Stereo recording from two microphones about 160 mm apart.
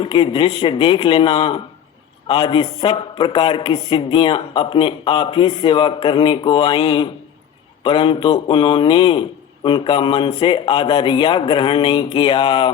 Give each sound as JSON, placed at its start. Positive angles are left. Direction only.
{"t": 0.0, "sound": "speech", "side_deg": 35}